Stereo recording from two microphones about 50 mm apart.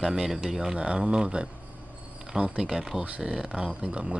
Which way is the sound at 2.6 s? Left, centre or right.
Centre.